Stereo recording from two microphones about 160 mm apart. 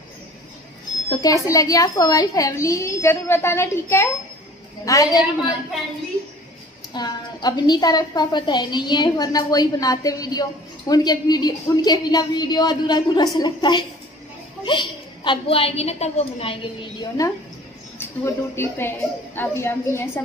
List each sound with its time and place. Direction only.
1.1 s a woman's voice: 20° left (ahead or behind)
6.9 s a woman's voice: 25° left (ahead or behind)
17.2 s a woman's voice: 20° left (ahead or behind)